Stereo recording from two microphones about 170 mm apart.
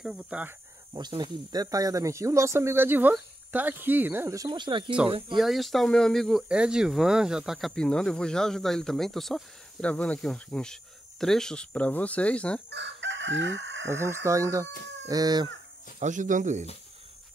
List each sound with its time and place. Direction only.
0.0 s speech: 5° right (ahead or behind)
0.9 s speech: 25° right (ahead or behind)
5.4 s speech: centre (ahead or behind)
12.6 s chicken: 90° right
13.8 s speech: 15° right (ahead or behind)
15.0 s a sound: 25° right (ahead or behind)
16.0 s speech: 45° right (ahead or behind)